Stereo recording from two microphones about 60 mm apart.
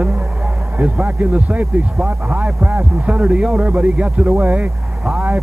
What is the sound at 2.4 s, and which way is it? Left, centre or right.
A man's voice, centre.